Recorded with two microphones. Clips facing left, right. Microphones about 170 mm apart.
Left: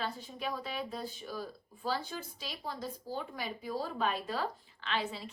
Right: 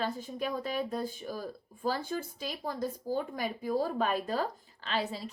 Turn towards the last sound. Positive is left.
turn(degrees=-40)  # may be behind; listen again after turning